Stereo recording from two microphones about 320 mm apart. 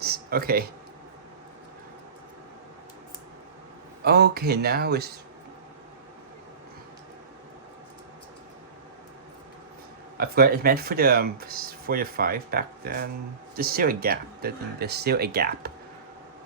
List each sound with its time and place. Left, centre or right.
0.0 s a sound: right
4.0 s speech: right
10.2 s speech: right